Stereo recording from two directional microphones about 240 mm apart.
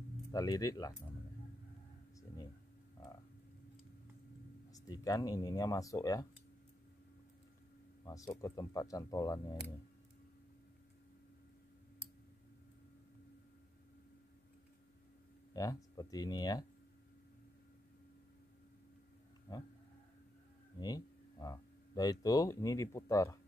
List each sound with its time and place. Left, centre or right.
0.3 s speech: centre
4.7 s speech: centre
8.0 s speech: centre
15.5 s speech: centre
19.5 s a sound: centre
20.8 s speech: centre